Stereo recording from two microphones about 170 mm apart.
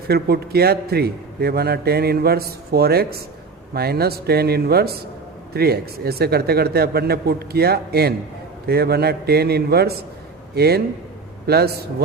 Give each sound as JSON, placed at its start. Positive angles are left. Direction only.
{"t": 0.1, "sound": "a man's voice", "side_deg": -70}